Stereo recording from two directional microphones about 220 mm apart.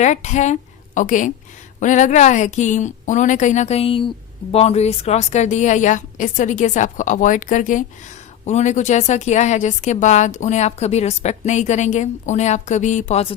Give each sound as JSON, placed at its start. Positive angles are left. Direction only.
{"t": 0.0, "sound": "a woman's voice", "side_deg": 30}